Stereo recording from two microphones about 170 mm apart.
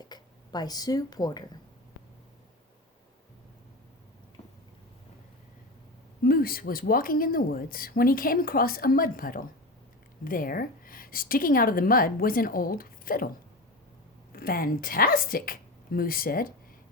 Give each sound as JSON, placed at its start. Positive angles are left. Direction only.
{"t": 0.0, "sound": "speech", "side_deg": 25}
{"t": 6.2, "sound": "speech", "side_deg": 60}
{"t": 14.3, "sound": "speech", "side_deg": 60}